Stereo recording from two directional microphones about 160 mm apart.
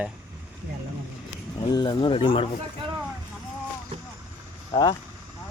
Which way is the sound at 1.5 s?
30° left (ahead or behind).